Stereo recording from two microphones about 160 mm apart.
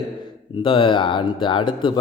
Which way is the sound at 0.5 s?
30° left (ahead or behind).